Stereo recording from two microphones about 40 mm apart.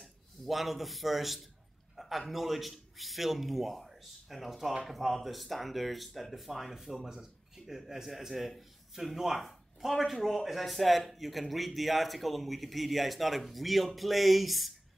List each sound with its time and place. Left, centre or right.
0.5 s speech: centre